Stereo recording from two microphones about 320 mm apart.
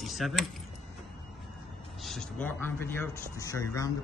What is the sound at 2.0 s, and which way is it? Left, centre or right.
Speech, centre.